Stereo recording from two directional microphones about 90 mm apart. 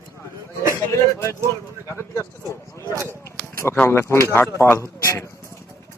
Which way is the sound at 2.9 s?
30° right (ahead or behind).